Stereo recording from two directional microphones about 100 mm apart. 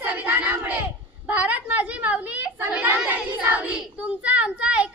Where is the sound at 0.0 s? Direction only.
15° right (ahead or behind).